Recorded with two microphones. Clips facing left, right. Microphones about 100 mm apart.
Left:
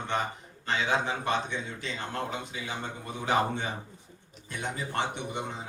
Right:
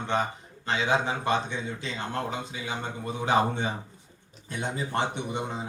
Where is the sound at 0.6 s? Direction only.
20° right (ahead or behind).